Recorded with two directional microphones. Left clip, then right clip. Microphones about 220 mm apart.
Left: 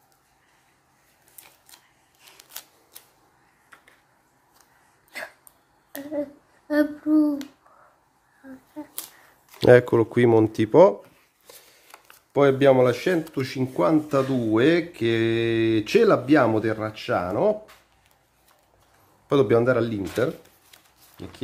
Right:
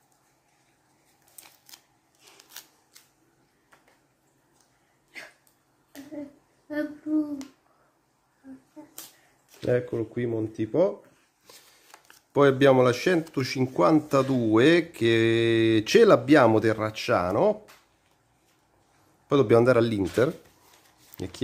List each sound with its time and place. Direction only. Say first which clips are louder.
2.3 s scissors: left 3 dB; 15° left (ahead or behind)
9.6 s speech: left 11 dB; 35° left (ahead or behind)
11.4 s a sound: left 3 dB; centre (ahead or behind)
12.3 s speech: left 2 dB; 10° right (ahead or behind)
19.2 s a man's voice: left 2 dB; 5° right (ahead or behind)
19.5 s a man's voice: right 1 dB; 25° right (ahead or behind)